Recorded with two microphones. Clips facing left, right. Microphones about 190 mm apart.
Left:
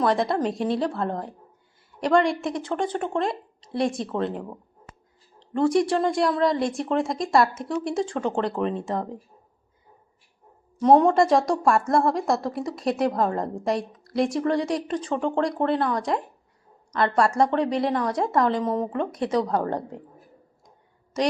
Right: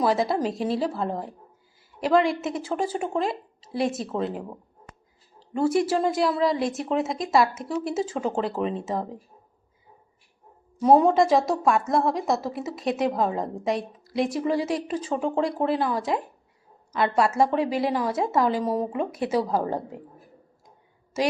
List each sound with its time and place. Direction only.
0.0 s a woman's voice: 5° right (ahead or behind)
10.8 s a woman's voice: 5° right (ahead or behind)
20.7 s a sound: 5° right (ahead or behind)